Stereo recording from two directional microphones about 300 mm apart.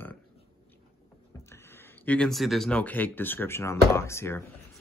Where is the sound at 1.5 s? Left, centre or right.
Centre.